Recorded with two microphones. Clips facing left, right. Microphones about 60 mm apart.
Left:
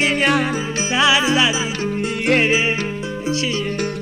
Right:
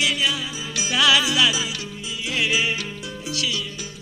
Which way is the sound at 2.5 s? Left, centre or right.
Left.